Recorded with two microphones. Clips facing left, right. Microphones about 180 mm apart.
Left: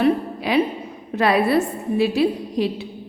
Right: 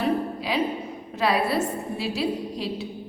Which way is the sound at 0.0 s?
60° left (ahead or behind).